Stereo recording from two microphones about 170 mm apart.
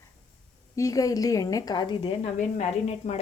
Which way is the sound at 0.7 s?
20° left (ahead or behind).